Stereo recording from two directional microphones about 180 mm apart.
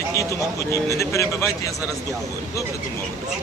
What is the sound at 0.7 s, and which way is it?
Speech, 15° left (ahead or behind).